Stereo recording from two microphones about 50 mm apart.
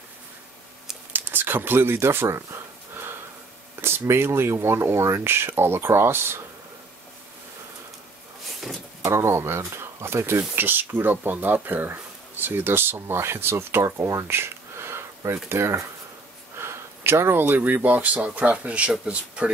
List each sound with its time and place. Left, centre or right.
1.1 s speech: right
3.8 s speech: right
9.0 s speech: right
14.2 s a sound: right
15.5 s speech: right